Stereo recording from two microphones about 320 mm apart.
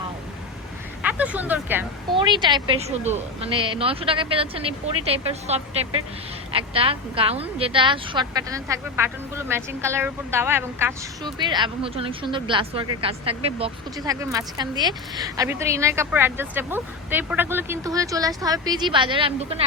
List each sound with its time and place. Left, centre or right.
1.0 s a woman's voice: centre